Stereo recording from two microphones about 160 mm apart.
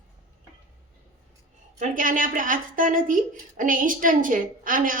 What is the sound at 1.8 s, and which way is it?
A woman's voice, 55° right (ahead or behind).